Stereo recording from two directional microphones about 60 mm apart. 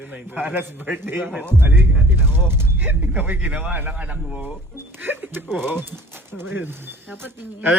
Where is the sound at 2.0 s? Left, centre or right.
Right.